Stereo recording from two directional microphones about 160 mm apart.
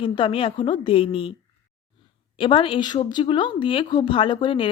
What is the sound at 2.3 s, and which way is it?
Speech, 30° left (ahead or behind).